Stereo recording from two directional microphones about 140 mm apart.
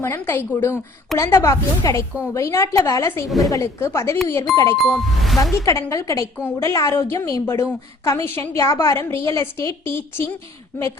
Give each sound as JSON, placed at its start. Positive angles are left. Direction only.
{"t": 0.0, "sound": "a woman's voice", "side_deg": 20}
{"t": 3.2, "sound": "music", "side_deg": 0}
{"t": 3.5, "sound": "a woman's voice", "side_deg": 20}
{"t": 4.8, "sound": "music", "side_deg": 0}
{"t": 5.4, "sound": "a woman's voice", "side_deg": 25}